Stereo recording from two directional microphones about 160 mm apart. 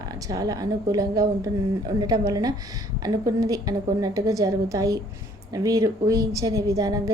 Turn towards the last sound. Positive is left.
turn(degrees=-20)  # may be behind; listen again after turning